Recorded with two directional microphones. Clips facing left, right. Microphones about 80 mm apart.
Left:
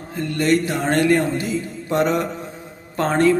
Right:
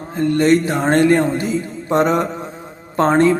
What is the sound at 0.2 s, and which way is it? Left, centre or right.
A man's voice, right.